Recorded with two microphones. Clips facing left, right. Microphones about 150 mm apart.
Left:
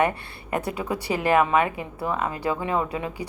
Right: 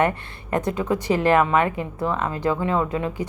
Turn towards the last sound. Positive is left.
turn(degrees=15)  # may be behind; listen again after turning